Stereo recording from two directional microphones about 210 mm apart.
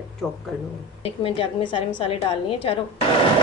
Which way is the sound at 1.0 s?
25° left (ahead or behind).